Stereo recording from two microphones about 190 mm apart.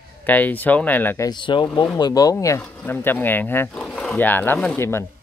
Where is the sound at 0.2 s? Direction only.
10° left (ahead or behind).